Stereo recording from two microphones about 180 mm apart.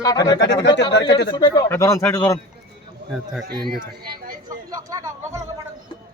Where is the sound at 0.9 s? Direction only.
70° left (ahead or behind).